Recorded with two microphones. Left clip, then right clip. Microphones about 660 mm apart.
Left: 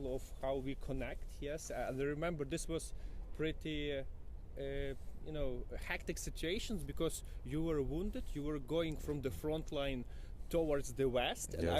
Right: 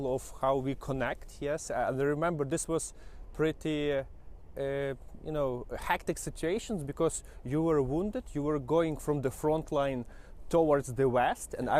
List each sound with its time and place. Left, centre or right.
0.0 s speech: right